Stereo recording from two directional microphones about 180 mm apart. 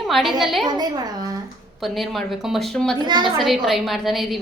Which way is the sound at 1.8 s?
Centre (ahead or behind).